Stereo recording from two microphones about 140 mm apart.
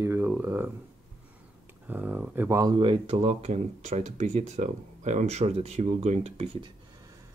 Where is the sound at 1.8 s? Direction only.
15° right (ahead or behind).